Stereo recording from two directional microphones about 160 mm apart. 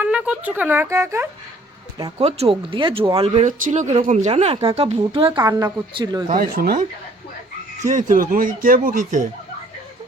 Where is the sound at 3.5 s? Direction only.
50° right (ahead or behind); by 6.2 s 25° right (ahead or behind).